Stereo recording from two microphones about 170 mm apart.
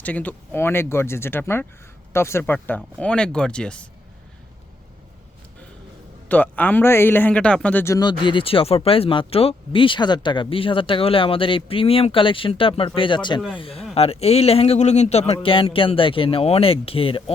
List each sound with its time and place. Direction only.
0.0 s a man's voice: 10° left (ahead or behind)
6.2 s a man's voice: 10° left (ahead or behind)
7.9 s speech: 25° left (ahead or behind)